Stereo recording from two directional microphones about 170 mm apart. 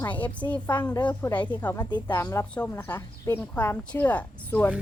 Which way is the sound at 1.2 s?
10° left (ahead or behind).